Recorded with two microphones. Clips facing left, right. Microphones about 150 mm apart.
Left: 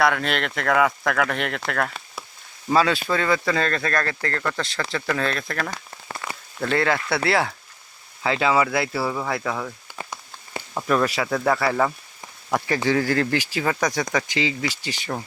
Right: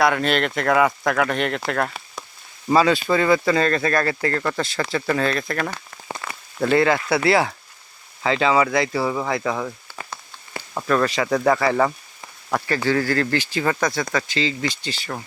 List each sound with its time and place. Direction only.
0.0 s speech: centre (ahead or behind)
1.7 s speech: 10° right (ahead or behind)
6.2 s a sound: 20° left (ahead or behind)
6.6 s speech: 5° right (ahead or behind)
10.8 s speech: 5° left (ahead or behind)
12.5 s speech: 10° left (ahead or behind)